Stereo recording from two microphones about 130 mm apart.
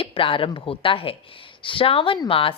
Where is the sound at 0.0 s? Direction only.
45° left (ahead or behind).